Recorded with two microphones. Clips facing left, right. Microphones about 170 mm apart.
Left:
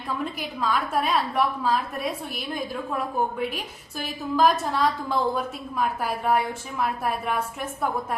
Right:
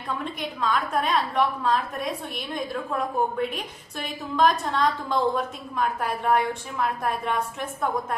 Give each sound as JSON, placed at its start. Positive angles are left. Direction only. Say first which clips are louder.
{"t": 0.3, "sound": "a woman's voice", "louder": "right 2 dB", "side_deg": 5}